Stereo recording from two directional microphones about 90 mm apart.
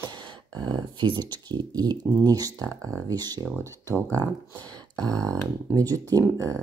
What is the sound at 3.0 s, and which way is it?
Speech, 45° right (ahead or behind).